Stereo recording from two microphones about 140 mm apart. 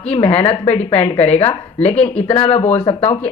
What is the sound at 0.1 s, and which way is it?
Speech, 40° left (ahead or behind).